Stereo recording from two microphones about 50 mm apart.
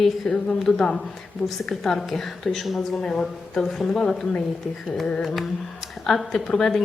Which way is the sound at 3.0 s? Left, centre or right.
Centre.